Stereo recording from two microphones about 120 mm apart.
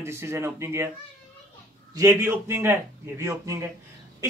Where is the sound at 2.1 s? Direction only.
20° right (ahead or behind).